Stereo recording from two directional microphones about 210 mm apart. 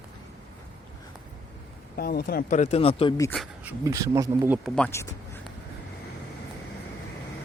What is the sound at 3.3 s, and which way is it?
Speech, centre (ahead or behind).